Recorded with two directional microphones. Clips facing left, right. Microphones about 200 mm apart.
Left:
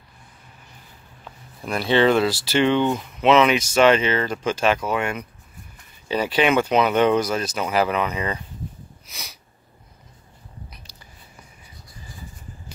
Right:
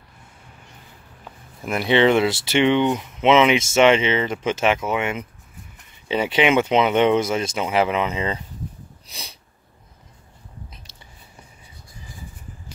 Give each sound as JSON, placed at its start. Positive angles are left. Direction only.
{"t": 1.7, "sound": "speech", "side_deg": -20}
{"t": 9.0, "sound": "sniff", "side_deg": -30}